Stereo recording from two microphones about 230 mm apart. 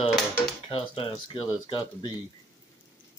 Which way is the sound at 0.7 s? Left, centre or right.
Left.